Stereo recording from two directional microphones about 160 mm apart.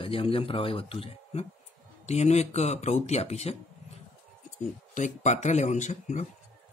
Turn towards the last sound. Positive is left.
turn(degrees=50)  # may be behind; listen again after turning